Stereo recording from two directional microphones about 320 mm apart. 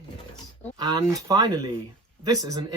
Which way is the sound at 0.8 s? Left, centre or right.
Centre.